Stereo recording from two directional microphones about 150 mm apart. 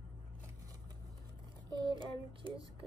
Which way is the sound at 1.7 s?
35° right (ahead or behind).